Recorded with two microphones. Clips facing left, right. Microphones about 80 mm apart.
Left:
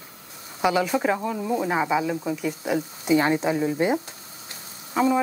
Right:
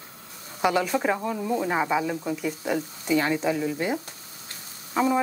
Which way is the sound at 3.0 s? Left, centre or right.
Left.